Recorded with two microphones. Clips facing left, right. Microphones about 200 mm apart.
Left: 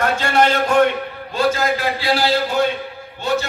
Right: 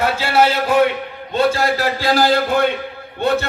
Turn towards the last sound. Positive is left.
turn(degrees=-60)  # may be behind; listen again after turning